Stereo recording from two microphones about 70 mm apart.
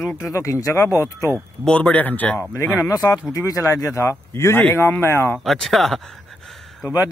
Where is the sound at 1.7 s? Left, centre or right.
Centre.